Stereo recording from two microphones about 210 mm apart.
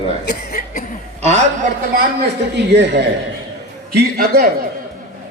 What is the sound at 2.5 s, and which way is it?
Speech, 55° right (ahead or behind).